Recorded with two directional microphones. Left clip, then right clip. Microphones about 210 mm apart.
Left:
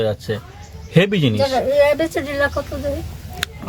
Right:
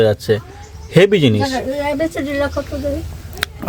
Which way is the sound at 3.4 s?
25° right (ahead or behind).